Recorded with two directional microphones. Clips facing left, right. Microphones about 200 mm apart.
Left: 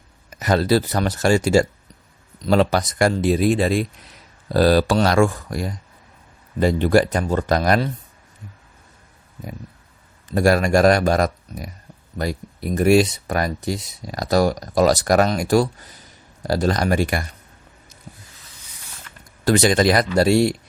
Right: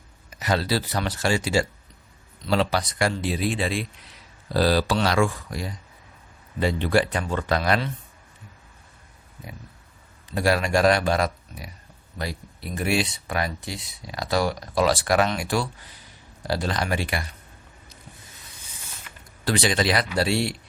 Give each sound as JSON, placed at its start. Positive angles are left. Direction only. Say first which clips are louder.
{"t": 0.3, "sound": "speech", "louder": "left 7 dB", "side_deg": 45}
{"t": 10.3, "sound": "speech", "louder": "left 6 dB", "side_deg": 45}
{"t": 19.5, "sound": "speech", "louder": "left 7 dB", "side_deg": 45}